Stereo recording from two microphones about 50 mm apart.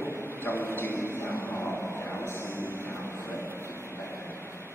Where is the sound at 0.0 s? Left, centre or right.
Left.